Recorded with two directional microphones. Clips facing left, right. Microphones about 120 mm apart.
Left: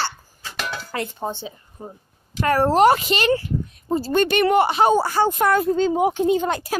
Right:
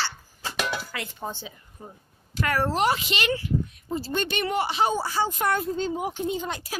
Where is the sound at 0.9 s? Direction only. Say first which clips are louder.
Left 7 dB; 35° left (ahead or behind).